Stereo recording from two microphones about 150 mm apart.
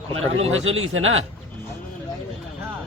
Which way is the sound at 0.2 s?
40° right (ahead or behind).